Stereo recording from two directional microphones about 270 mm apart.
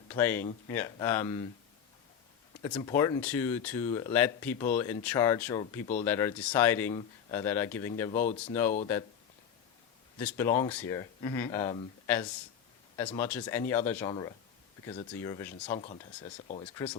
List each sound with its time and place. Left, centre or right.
0.1 s speech: centre
2.6 s speech: centre
10.2 s speech: centre
15.8 s speech: left